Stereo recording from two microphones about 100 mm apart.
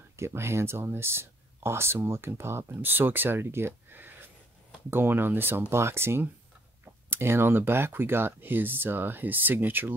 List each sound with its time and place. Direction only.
0.2 s speech: 25° right (ahead or behind)